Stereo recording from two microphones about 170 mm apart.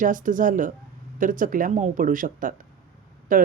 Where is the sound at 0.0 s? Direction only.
50° right (ahead or behind).